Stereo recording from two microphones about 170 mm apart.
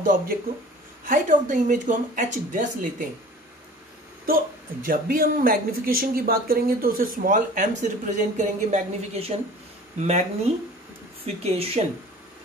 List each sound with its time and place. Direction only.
0.0 s a woman's voice: 55° right (ahead or behind)
4.8 s speech: 60° right (ahead or behind); by 11.8 s 35° right (ahead or behind)